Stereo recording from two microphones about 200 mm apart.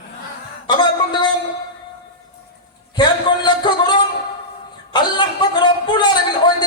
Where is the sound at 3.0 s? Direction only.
20° left (ahead or behind).